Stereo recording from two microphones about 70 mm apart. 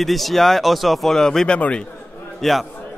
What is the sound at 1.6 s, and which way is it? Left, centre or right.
Speech, centre.